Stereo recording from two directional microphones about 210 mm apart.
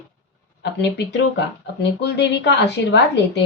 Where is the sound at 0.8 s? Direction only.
50° left (ahead or behind).